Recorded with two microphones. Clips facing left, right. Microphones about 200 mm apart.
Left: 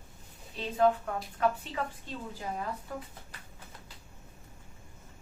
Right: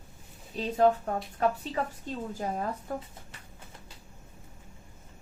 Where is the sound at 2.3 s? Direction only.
45° right (ahead or behind).